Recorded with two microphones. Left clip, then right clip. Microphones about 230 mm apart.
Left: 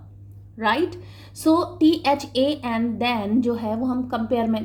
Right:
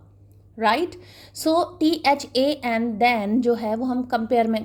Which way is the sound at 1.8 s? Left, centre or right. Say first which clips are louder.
Left 1 dB; right.